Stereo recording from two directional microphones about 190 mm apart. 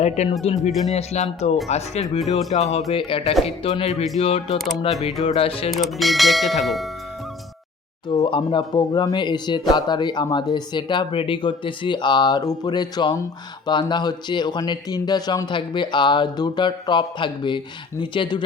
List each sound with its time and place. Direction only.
0.0 s speech: 35° left (ahead or behind)
0.7 s speech: centre (ahead or behind)
0.9 s speech: 35° left (ahead or behind)
5.7 s speech: centre (ahead or behind)
8.1 s speech: 25° left (ahead or behind)